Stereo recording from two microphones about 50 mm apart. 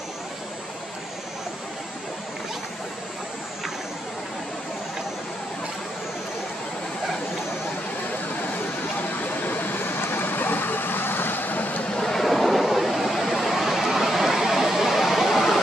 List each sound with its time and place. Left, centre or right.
9.2 s vehicle: left
11.9 s vehicle: centre